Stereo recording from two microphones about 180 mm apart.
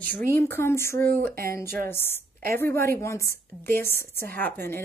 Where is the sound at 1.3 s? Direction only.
55° right (ahead or behind).